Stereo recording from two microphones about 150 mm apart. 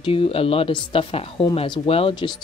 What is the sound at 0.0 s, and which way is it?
Speech, 40° left (ahead or behind).